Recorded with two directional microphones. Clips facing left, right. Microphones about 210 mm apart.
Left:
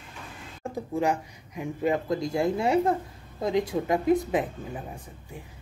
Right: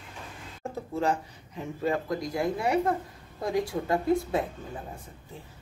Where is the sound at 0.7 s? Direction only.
15° left (ahead or behind).